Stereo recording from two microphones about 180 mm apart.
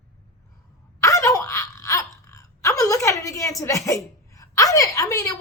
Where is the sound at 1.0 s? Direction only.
15° left (ahead or behind).